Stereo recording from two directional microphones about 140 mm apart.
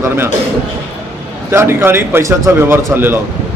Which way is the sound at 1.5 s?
20° right (ahead or behind).